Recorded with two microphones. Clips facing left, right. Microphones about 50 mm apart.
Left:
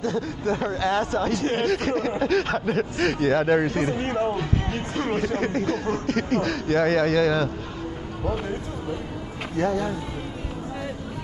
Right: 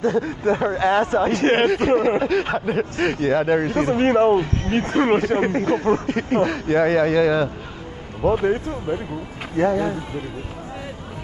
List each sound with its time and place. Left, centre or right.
0.0 s speech: right
1.3 s speech: right
1.7 s speech: centre
3.9 s speech: right
4.9 s speech: right
6.0 s speech: centre
8.2 s speech: right
9.6 s speech: centre